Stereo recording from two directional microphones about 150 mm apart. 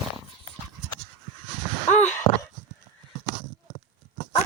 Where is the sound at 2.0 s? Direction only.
15° left (ahead or behind).